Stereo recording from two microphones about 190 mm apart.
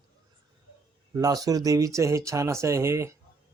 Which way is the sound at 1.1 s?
20° right (ahead or behind).